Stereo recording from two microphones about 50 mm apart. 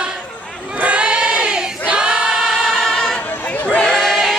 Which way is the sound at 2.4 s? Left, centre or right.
Centre.